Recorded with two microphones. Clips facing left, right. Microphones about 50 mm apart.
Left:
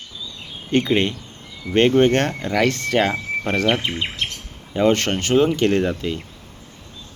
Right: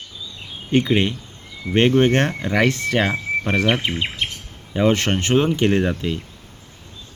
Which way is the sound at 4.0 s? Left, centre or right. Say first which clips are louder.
Right 1 dB; centre.